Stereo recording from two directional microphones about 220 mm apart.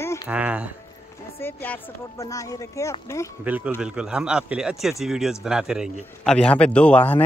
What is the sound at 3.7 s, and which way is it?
Speech, 5° right (ahead or behind).